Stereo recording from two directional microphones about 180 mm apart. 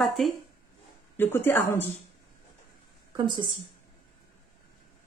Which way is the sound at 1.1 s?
10° left (ahead or behind).